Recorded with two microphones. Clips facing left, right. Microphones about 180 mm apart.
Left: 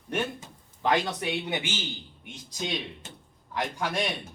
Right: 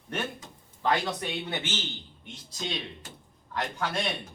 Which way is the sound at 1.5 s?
10° left (ahead or behind).